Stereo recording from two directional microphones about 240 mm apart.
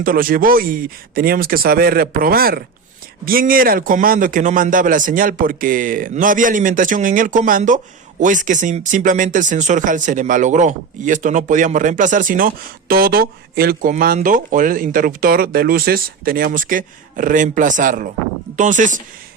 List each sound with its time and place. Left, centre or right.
0.0 s speech: right